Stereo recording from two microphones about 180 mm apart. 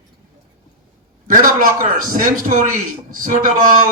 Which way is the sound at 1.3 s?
50° right (ahead or behind).